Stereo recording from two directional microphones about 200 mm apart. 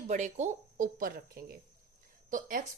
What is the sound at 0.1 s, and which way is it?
A woman's voice, 35° right (ahead or behind).